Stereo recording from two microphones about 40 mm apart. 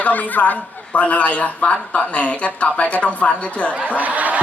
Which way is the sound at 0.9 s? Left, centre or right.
Left.